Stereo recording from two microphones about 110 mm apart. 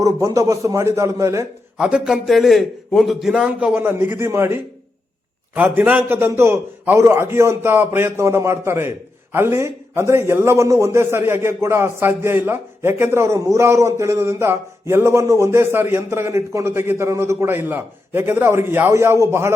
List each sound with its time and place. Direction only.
0.0 s a man's voice: 30° right (ahead or behind)
1.8 s a man's voice: 5° right (ahead or behind)
3.8 s a man's voice: 20° right (ahead or behind)